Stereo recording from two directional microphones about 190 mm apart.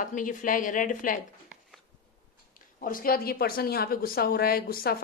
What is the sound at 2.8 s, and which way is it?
A woman's voice, 50° left (ahead or behind).